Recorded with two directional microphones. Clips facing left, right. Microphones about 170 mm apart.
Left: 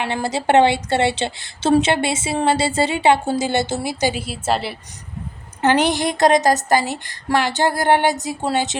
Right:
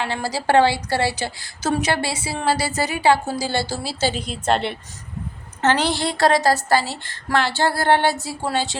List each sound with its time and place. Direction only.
0.0 s speech: 20° left (ahead or behind); by 4.8 s 5° left (ahead or behind)
5.6 s a woman's voice: 15° left (ahead or behind)